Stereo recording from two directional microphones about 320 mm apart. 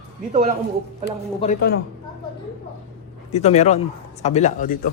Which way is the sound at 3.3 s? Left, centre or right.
Left.